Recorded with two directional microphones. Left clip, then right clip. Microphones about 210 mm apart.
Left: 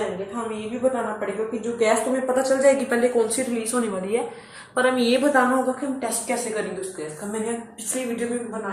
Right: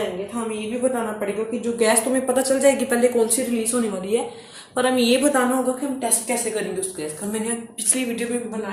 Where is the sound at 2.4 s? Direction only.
40° right (ahead or behind).